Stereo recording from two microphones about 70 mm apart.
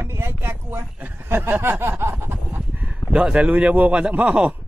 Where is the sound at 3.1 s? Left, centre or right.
Centre.